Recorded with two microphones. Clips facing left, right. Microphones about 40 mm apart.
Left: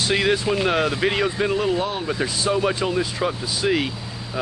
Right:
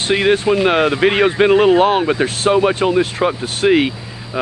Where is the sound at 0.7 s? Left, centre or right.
Right.